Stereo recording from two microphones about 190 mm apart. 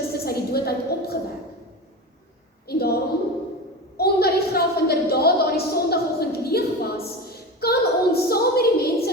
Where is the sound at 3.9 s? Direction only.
55° left (ahead or behind).